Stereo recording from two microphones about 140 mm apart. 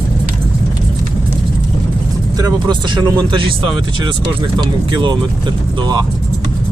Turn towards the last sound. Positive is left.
turn(degrees=-30)  # may be behind; listen again after turning